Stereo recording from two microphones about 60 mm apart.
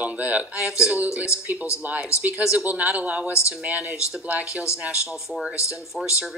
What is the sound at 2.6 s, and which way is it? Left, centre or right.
Speech, right.